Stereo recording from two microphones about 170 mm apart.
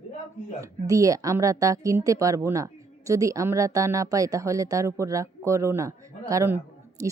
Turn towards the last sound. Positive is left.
turn(degrees=-15)  # may be behind; listen again after turning